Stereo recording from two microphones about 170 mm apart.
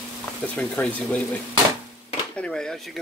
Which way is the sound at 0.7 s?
5° left (ahead or behind).